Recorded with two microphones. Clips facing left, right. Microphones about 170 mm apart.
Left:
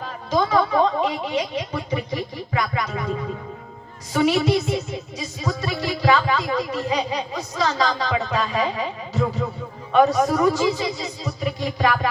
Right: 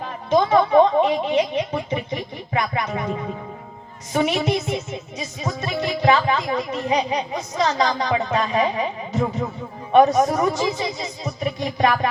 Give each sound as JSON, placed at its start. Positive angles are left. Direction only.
{"t": 0.3, "sound": "speech", "side_deg": -25}
{"t": 4.1, "sound": "speech", "side_deg": -20}